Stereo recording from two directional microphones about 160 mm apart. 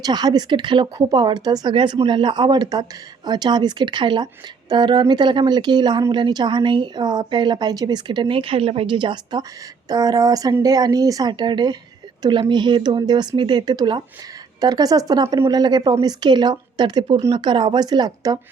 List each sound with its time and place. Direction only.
0.0 s speech: 25° right (ahead or behind)